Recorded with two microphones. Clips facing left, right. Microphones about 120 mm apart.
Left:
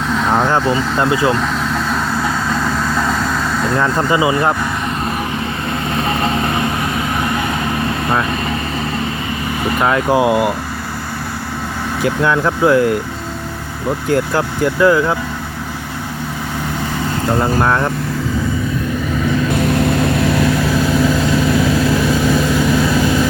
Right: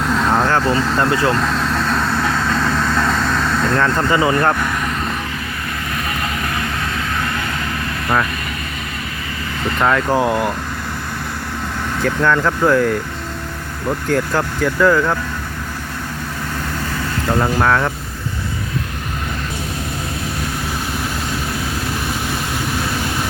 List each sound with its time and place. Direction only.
0.1 s vehicle: centre (ahead or behind)
0.8 s speech: centre (ahead or behind)
1.1 s speech: 15° left (ahead or behind)
1.4 s vehicle: centre (ahead or behind)
6.0 s vehicle: 25° left (ahead or behind)
9.6 s speech: 10° left (ahead or behind)
12.0 s speech: 10° left (ahead or behind)
14.1 s speech: 5° left (ahead or behind)
17.6 s speech: 10° left (ahead or behind)
19.5 s vehicle: 75° left (ahead or behind); by 21.9 s 90° left